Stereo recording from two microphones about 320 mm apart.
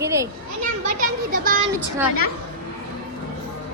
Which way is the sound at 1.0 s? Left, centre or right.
Right.